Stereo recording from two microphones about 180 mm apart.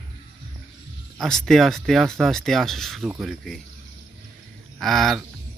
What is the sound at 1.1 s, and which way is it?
Speech, 5° left (ahead or behind).